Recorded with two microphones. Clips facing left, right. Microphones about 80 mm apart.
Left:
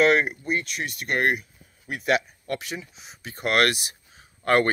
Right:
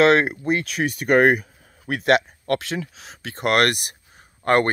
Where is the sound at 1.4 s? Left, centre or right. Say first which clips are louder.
Right 7 dB; right.